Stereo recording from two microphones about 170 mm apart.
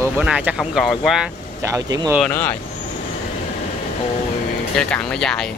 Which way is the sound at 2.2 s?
10° left (ahead or behind).